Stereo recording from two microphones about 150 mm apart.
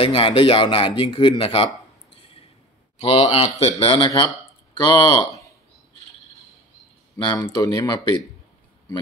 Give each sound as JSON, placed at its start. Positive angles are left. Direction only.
{"t": 0.0, "sound": "speech", "side_deg": 35}
{"t": 3.0, "sound": "speech", "side_deg": 40}
{"t": 7.2, "sound": "speech", "side_deg": 30}